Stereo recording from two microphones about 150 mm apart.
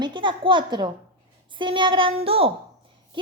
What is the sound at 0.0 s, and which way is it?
A woman's voice, 30° right (ahead or behind).